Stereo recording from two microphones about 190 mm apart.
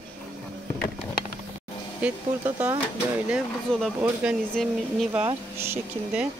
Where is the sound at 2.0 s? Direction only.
10° right (ahead or behind).